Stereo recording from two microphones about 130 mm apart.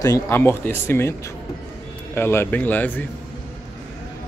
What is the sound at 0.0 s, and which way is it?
Speech, 20° left (ahead or behind).